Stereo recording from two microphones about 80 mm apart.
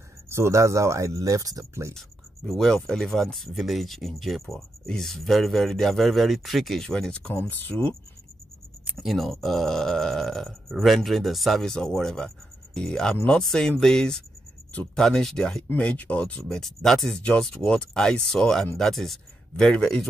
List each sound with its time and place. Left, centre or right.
0.3 s speech: right
2.0 s speech: centre
7.3 s speech: left
8.9 s speech: centre